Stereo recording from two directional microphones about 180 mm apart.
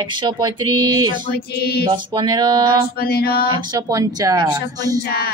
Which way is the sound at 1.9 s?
25° right (ahead or behind).